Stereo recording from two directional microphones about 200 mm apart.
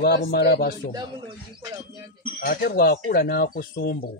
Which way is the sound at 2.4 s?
45° left (ahead or behind).